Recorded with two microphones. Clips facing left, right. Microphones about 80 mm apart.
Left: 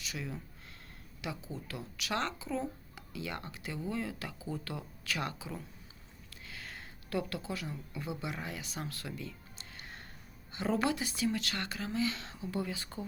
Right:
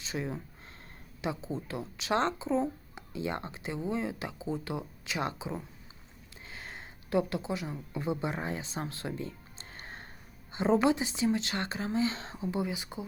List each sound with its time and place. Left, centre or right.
0.0 s speech: right